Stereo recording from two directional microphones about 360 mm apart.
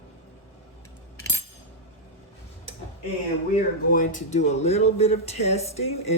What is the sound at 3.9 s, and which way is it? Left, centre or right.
Speech, centre.